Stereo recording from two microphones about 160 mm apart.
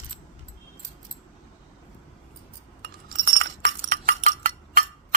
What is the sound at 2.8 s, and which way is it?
Chink, 65° right (ahead or behind).